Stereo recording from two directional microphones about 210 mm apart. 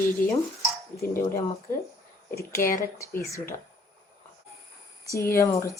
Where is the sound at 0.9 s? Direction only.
15° left (ahead or behind).